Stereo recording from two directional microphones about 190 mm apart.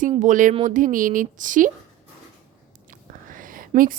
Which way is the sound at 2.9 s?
45° right (ahead or behind).